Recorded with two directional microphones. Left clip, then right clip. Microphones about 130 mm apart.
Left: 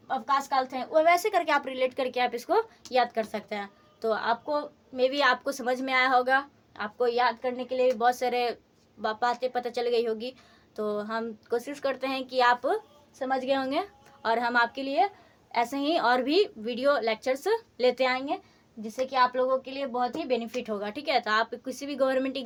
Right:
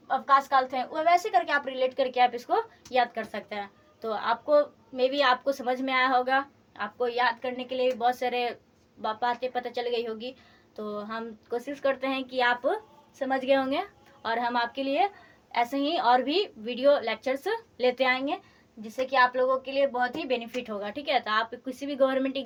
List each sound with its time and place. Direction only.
0.1 s a woman's voice: 40° left (ahead or behind); by 15.1 s 25° left (ahead or behind)
15.5 s a woman's voice: 40° left (ahead or behind)